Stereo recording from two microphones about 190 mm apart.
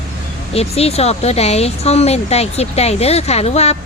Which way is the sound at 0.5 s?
30° left (ahead or behind).